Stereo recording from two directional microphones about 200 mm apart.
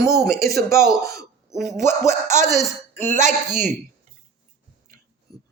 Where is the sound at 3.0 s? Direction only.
35° right (ahead or behind).